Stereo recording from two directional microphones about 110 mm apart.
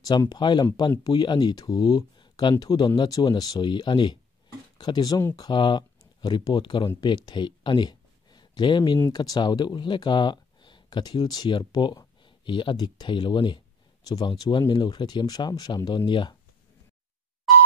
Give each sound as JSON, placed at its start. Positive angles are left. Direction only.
{"t": 0.3, "sound": "speech", "side_deg": 45}